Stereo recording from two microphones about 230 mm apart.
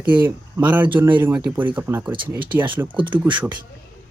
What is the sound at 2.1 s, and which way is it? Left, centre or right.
Speech, right.